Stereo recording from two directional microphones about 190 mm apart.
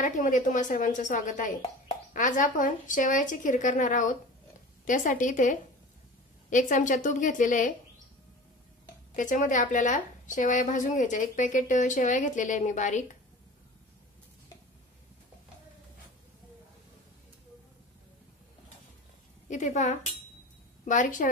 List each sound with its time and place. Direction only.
0.0 s a woman's voice: 40° left (ahead or behind)
9.1 s a woman's voice: 40° left (ahead or behind)
19.5 s a woman's voice: 40° left (ahead or behind)